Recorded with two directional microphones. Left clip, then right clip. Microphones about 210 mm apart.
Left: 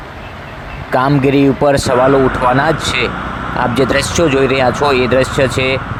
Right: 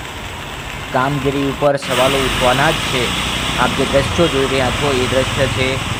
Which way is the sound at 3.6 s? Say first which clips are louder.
Left 3 dB; 30° left (ahead or behind).